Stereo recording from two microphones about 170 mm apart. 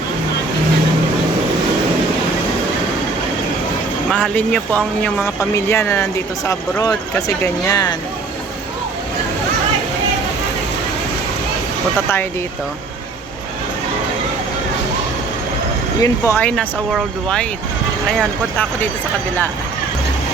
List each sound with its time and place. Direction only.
4.1 s speech: 10° left (ahead or behind)
16.0 s speech: 20° left (ahead or behind)